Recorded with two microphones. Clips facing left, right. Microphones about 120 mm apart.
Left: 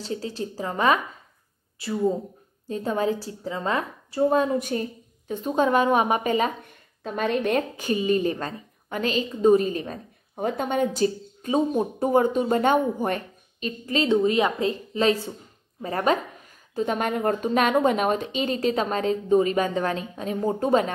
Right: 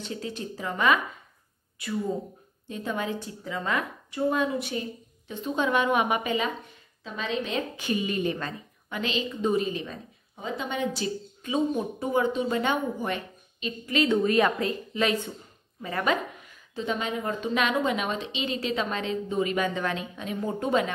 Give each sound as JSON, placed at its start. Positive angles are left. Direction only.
{"t": 0.0, "sound": "a woman's voice", "side_deg": 35}